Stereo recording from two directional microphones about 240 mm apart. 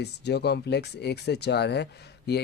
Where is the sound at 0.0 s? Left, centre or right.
Left.